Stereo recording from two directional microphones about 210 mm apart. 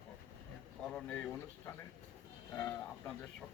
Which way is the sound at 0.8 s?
5° left (ahead or behind).